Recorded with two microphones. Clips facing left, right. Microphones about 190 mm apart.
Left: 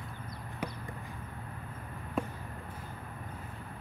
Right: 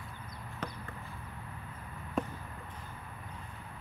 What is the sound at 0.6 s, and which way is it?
Chop, 10° left (ahead or behind).